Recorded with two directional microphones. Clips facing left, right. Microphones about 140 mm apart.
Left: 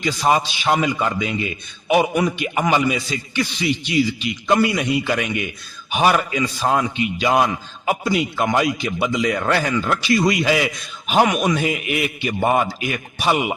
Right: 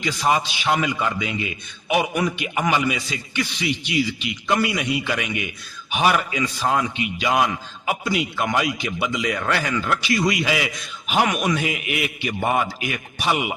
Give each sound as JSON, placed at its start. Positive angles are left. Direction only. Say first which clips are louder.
{"t": 0.0, "sound": "a man's voice", "louder": "left 3 dB", "side_deg": 40}
{"t": 11.3, "sound": "a man's voice", "louder": "left 3 dB", "side_deg": 25}
{"t": 11.6, "sound": "a man's voice", "louder": "left 4 dB", "side_deg": 35}